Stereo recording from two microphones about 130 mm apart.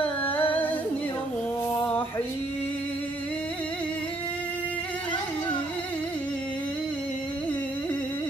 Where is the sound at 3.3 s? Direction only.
10° left (ahead or behind).